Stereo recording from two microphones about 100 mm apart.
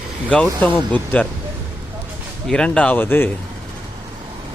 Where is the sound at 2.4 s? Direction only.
10° left (ahead or behind).